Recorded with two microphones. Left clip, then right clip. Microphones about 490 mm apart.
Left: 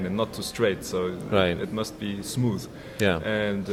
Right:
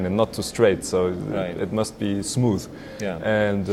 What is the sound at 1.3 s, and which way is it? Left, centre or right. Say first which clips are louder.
Speech: left 4 dB; left.